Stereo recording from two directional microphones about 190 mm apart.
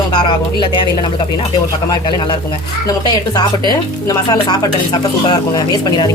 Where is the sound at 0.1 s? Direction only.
25° left (ahead or behind).